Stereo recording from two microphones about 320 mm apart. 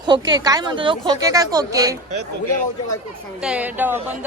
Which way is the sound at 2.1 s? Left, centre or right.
Right.